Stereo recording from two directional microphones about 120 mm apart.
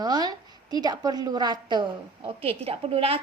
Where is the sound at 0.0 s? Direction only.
35° right (ahead or behind).